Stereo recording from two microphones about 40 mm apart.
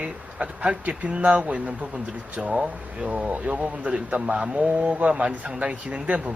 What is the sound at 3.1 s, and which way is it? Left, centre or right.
Speech, right.